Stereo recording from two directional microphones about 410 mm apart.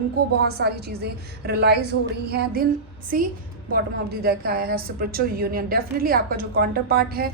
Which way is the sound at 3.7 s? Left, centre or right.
Right.